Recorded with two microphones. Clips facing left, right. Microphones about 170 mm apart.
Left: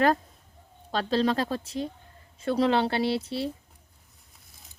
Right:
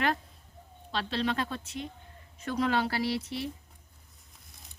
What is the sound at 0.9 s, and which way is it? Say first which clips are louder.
A woman's voice: left 6 dB; 40° left (ahead or behind).